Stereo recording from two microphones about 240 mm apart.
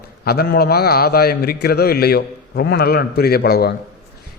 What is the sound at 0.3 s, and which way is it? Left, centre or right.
A man's voice, left.